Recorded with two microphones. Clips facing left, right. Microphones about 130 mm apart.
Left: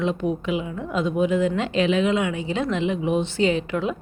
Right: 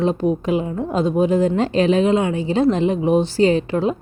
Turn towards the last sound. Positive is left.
turn(degrees=-35)  # may be behind; listen again after turning